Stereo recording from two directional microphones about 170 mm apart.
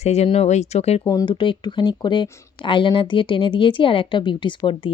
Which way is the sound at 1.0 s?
20° left (ahead or behind).